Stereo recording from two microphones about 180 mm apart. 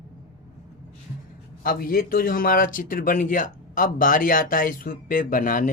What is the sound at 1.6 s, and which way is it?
Speech, 55° left (ahead or behind).